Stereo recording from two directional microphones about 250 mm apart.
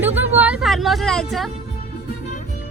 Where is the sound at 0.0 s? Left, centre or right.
Centre.